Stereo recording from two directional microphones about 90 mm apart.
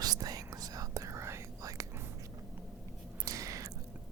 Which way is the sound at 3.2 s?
40° right (ahead or behind).